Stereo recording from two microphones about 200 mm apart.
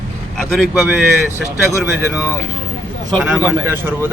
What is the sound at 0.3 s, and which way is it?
Speech, centre (ahead or behind).